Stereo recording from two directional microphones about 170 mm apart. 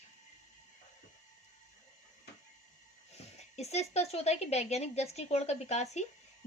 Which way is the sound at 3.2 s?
40° left (ahead or behind).